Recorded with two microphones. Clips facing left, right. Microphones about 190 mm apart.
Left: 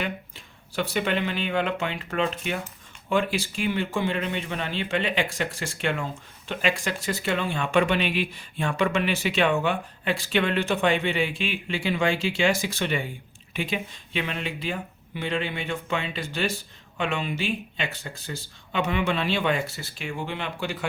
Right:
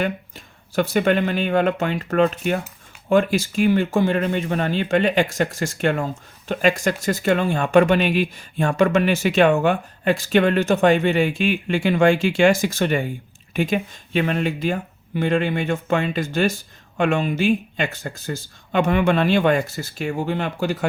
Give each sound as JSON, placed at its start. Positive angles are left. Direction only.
{"t": 0.0, "sound": "speech", "side_deg": -45}